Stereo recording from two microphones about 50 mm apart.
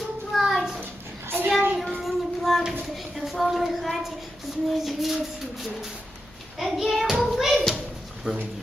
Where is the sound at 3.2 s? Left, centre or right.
Centre.